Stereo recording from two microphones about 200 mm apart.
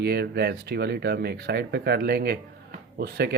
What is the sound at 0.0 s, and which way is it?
Speech, 55° right (ahead or behind).